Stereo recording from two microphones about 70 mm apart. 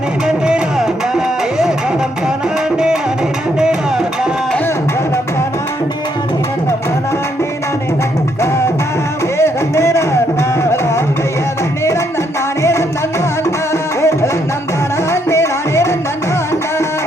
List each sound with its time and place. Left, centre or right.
0.3 s music: centre
2.7 s music: centre
8.4 s music: left
9.4 s a sound: left
10.6 s music: left
14.0 s music: left